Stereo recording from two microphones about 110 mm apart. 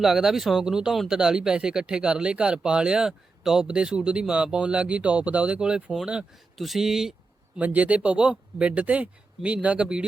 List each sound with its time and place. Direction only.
0.0 s speech: 5° right (ahead or behind)